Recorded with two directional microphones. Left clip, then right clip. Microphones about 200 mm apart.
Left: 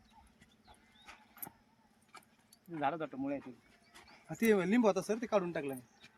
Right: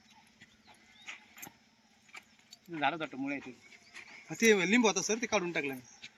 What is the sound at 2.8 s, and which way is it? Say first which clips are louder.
Speech: right 3 dB; 10° left (ahead or behind).